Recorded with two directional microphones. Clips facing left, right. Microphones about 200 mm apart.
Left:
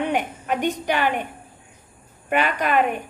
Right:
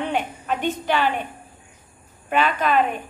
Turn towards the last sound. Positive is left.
turn(degrees=15)  # may be behind; listen again after turning